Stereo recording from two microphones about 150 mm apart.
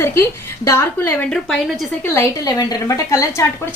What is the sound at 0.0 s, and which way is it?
Speech, 15° left (ahead or behind).